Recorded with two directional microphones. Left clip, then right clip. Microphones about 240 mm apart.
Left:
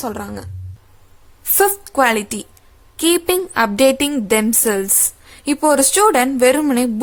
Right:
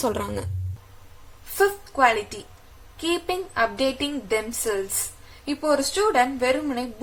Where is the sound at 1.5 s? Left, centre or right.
Left.